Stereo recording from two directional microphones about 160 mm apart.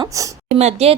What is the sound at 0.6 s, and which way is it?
Speech, 45° right (ahead or behind).